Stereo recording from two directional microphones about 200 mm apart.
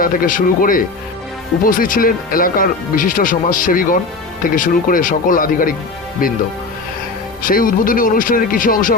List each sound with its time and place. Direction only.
0.0 s speech: 45° left (ahead or behind)
7.4 s speech: 45° left (ahead or behind)